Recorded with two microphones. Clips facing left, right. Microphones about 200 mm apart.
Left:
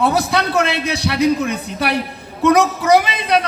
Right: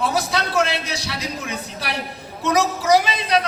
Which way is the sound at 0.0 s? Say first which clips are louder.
Left 5 dB; 60° left (ahead or behind).